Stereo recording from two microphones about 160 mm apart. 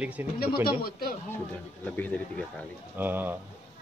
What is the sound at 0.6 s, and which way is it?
Speech, 70° left (ahead or behind).